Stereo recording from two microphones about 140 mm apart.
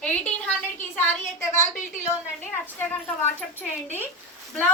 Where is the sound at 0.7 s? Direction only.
15° left (ahead or behind).